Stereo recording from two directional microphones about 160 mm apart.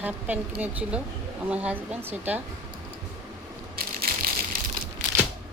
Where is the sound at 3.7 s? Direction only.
70° right (ahead or behind).